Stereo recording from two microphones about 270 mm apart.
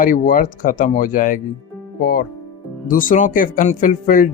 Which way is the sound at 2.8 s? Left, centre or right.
Left.